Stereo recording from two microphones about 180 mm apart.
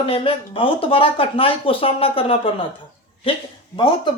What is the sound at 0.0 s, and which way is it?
Speech, 30° left (ahead or behind).